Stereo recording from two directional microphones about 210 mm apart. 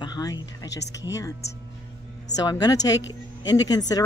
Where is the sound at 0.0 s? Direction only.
20° left (ahead or behind).